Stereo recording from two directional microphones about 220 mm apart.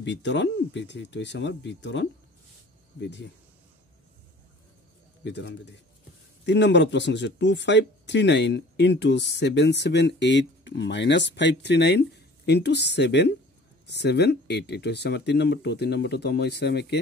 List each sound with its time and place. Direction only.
0.0 s speech: 55° left (ahead or behind)
5.2 s speech: 55° left (ahead or behind)